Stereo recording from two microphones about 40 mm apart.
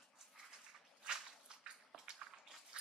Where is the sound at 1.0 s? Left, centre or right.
Right.